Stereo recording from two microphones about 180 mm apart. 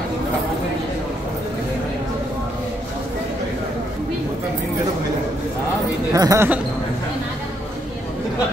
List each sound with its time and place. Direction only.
6.1 s speech: 15° right (ahead or behind)